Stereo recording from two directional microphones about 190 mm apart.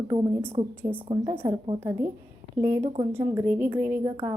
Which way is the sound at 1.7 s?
15° right (ahead or behind).